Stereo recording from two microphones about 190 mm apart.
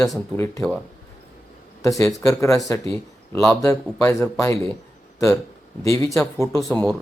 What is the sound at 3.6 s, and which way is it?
Speech, 15° left (ahead or behind).